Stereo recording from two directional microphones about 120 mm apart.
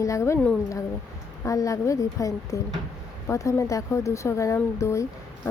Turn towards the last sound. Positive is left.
turn(degrees=25)  # may be behind; listen again after turning